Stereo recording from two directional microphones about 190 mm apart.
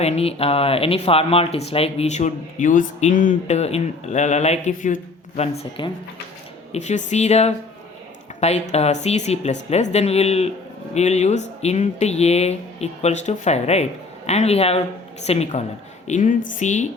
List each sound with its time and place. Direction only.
0.0 s speech: 35° left (ahead or behind)
5.4 s speech: 30° left (ahead or behind)